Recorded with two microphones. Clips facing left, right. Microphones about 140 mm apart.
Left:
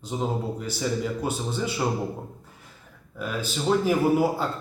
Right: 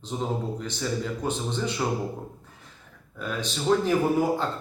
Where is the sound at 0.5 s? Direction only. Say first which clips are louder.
Left 2 dB; 10° left (ahead or behind).